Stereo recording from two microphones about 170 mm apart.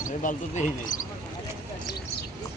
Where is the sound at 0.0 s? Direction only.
50° left (ahead or behind).